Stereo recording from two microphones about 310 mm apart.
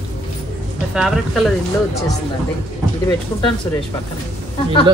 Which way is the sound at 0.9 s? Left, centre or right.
Centre.